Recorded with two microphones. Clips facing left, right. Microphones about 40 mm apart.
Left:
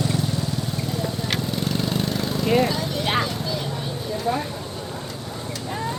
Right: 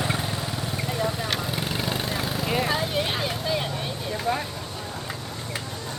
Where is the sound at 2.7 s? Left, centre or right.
Right.